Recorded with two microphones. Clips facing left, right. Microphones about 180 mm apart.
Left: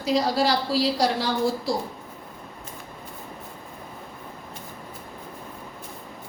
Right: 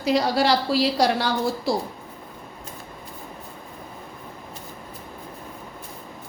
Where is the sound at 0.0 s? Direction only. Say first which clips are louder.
Right 2 dB; 65° right (ahead or behind).